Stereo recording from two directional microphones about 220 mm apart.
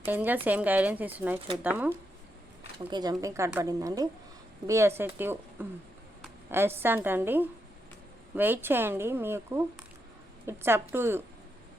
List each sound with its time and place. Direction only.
0.0 s speech: 10° right (ahead or behind)
2.9 s speech: 15° right (ahead or behind)